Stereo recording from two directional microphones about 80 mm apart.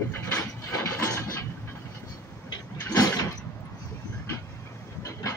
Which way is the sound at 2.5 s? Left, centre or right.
Left.